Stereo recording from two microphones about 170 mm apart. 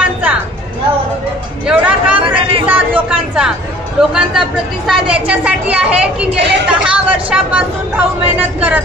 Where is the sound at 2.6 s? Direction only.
10° right (ahead or behind).